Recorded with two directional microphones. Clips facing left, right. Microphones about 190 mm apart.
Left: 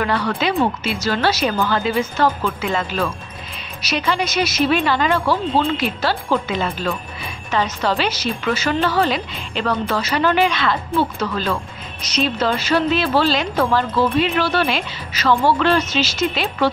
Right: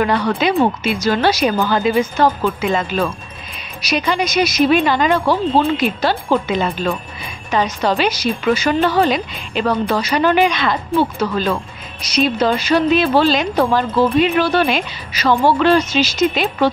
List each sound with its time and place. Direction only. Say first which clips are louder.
0.0 s speech: right 4 dB; 20° right (ahead or behind)